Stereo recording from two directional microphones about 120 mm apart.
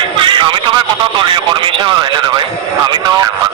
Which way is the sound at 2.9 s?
35° right (ahead or behind).